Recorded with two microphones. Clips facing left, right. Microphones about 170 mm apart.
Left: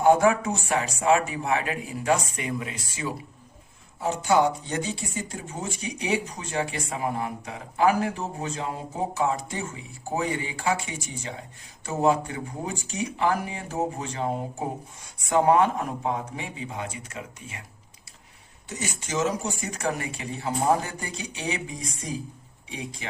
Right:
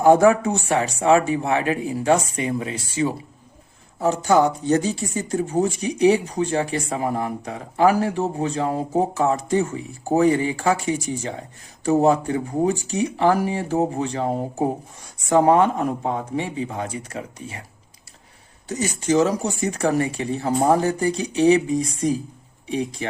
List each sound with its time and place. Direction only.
0.0 s speech: 35° right (ahead or behind)
4.0 s speech: 40° right (ahead or behind)
18.7 s speech: 35° right (ahead or behind)